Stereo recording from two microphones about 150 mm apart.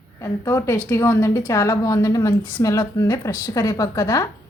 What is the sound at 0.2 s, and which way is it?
A woman's voice, 20° left (ahead or behind).